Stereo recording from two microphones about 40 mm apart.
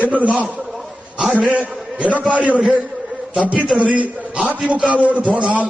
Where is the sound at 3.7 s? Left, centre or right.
Right.